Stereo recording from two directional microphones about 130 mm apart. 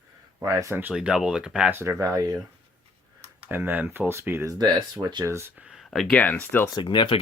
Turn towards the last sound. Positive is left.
turn(degrees=35)  # may be behind; listen again after turning